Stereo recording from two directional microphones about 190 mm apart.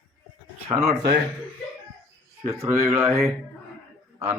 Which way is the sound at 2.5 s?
15° right (ahead or behind).